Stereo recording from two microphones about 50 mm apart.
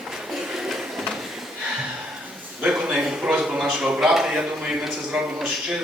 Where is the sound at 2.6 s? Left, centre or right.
Right.